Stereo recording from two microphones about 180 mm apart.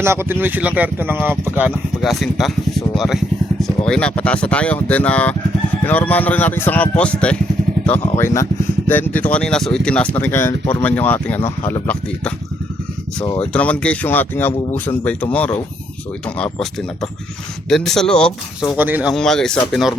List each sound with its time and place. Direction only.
0.0 s speech: 15° right (ahead or behind); by 7.3 s 5° left (ahead or behind)
8.2 s speech: 15° left (ahead or behind)
13.4 s speech: 5° left (ahead or behind)
18.8 s speech: 10° right (ahead or behind)
19.1 s speech: 5° left (ahead or behind)